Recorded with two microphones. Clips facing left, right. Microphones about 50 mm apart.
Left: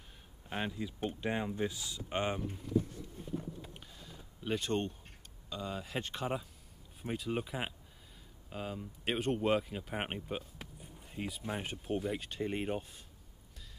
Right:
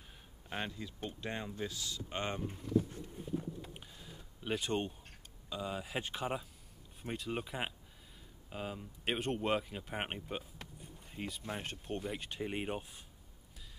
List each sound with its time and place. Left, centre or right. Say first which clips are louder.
0.5 s speech: left 3 dB; centre
3.3 s a sound: right 1 dB; centre
4.4 s speech: left 2 dB; centre